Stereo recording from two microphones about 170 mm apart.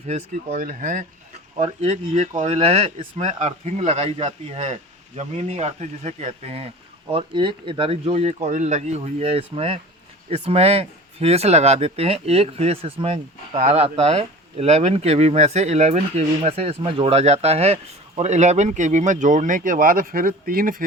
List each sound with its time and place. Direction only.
0.1 s speech: 40° right (ahead or behind)
0.6 s speech: 50° right (ahead or behind)
1.5 s speech: 40° right (ahead or behind); by 20.8 s 55° right (ahead or behind)